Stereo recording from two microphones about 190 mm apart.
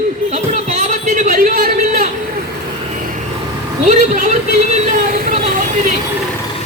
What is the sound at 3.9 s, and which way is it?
Speech, 45° right (ahead or behind).